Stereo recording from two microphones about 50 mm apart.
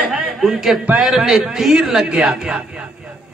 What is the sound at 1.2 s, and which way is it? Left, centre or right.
A man's voice, centre.